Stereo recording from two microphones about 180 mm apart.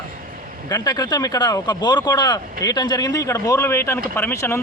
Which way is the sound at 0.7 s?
20° left (ahead or behind).